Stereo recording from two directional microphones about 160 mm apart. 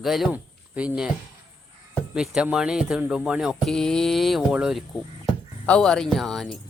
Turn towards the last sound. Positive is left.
turn(degrees=5)  # may be behind; listen again after turning